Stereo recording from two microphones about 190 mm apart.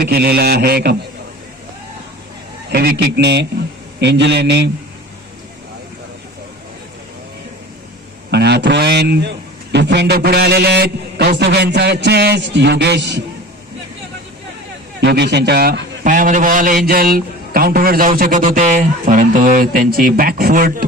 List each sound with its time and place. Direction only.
0.0 s a man's voice: 55° right (ahead or behind)
2.7 s a man's voice: 60° right (ahead or behind)
8.3 s a man's voice: 65° right (ahead or behind)
15.0 s a man's voice: 60° right (ahead or behind)